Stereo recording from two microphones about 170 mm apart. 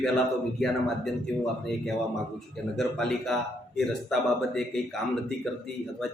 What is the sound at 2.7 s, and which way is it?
A man's voice, centre (ahead or behind).